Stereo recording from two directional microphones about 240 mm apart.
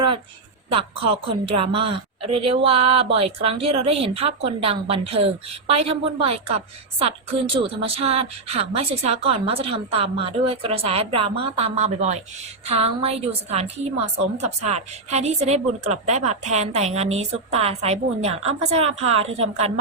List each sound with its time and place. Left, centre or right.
0.7 s a woman's voice: right